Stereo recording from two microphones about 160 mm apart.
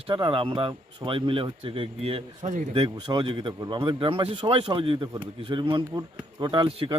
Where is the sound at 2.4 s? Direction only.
50° right (ahead or behind).